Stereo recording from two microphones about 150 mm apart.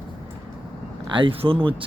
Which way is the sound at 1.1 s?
35° right (ahead or behind).